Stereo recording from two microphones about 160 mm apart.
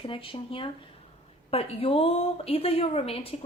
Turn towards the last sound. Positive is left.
turn(degrees=35)  # may be behind; listen again after turning